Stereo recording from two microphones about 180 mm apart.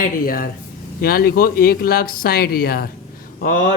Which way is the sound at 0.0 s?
50° left (ahead or behind).